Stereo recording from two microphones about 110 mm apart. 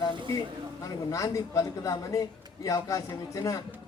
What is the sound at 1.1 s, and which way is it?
A man's voice, 30° left (ahead or behind).